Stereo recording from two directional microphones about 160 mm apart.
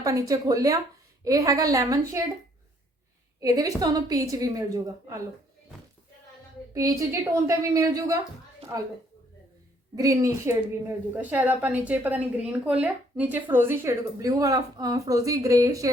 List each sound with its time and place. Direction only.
0.0 s a woman's voice: 20° right (ahead or behind)
3.4 s a woman's voice: 20° right (ahead or behind)
6.7 s a woman's voice: 20° right (ahead or behind)
9.9 s a woman's voice: 20° right (ahead or behind)